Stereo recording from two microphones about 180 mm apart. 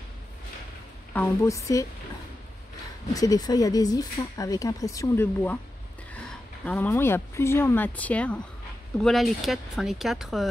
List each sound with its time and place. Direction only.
1.1 s speech: 10° left (ahead or behind)
3.2 s speech: 20° left (ahead or behind); by 10.4 s centre (ahead or behind)